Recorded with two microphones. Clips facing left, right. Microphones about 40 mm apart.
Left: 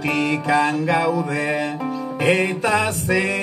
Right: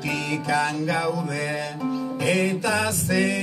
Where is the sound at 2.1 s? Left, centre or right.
Left.